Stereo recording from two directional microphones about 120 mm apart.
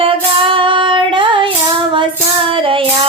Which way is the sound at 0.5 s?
45° right (ahead or behind).